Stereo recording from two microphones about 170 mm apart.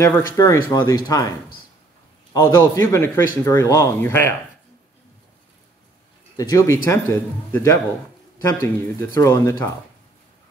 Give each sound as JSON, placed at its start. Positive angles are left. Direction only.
{"t": 0.0, "sound": "speech", "side_deg": 15}
{"t": 2.3, "sound": "speech", "side_deg": 15}
{"t": 6.3, "sound": "speech", "side_deg": 20}